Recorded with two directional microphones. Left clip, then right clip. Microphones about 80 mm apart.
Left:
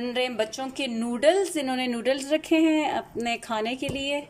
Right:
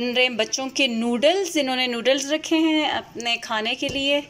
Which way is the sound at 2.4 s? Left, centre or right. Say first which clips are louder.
Right 2 dB; left.